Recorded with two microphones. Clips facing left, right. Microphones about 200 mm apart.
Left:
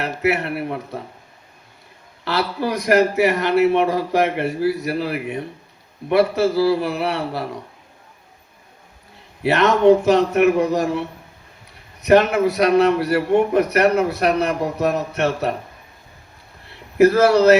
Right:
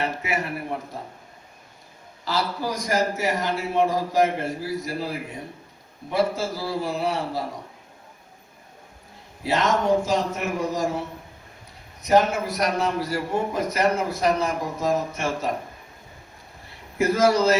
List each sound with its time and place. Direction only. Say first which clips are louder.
0.0 s a man's voice: left 6 dB; 70° left (ahead or behind)
2.2 s a man's voice: left 4 dB; 65° left (ahead or behind)
9.4 s a man's voice: left 8 dB; 65° left (ahead or behind)
12.0 s a man's voice: left 6 dB; 70° left (ahead or behind)
17.0 s a man's voice: left 7 dB; 65° left (ahead or behind)